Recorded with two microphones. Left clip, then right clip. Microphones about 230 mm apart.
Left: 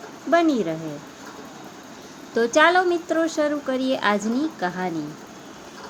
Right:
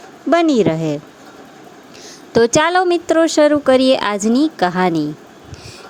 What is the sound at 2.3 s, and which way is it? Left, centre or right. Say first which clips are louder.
A woman's voice: right 4 dB; right.